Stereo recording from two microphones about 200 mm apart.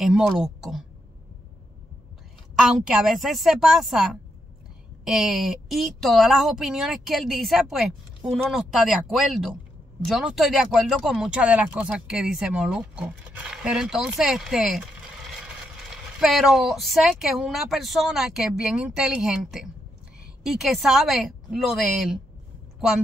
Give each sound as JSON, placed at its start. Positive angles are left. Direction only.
{"t": 0.0, "sound": "speech", "side_deg": 0}
{"t": 2.5, "sound": "a woman's voice", "side_deg": 0}